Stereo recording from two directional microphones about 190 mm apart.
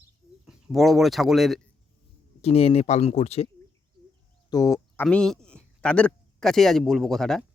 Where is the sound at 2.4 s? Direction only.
30° left (ahead or behind).